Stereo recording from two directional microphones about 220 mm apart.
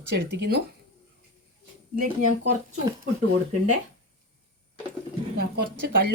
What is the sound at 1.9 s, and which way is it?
Speech, 40° right (ahead or behind).